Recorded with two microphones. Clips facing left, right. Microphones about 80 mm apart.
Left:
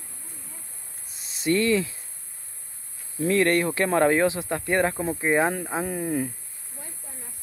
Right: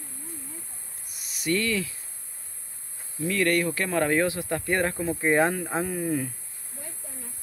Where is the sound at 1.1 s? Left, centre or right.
Left.